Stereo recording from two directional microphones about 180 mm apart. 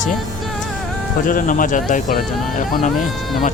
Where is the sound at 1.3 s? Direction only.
50° left (ahead or behind).